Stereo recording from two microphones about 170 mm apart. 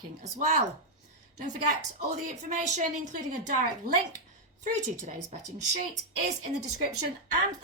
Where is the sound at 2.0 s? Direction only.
45° right (ahead or behind).